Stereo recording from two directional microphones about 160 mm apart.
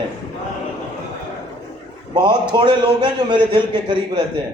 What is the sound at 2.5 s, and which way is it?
A man's voice, 30° right (ahead or behind).